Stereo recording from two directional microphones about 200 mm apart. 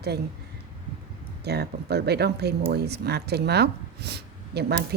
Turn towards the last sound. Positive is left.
turn(degrees=-55)  # may be behind; listen again after turning